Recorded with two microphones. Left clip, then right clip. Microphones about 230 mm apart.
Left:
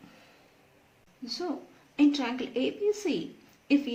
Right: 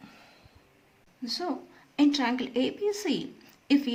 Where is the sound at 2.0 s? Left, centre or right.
Right.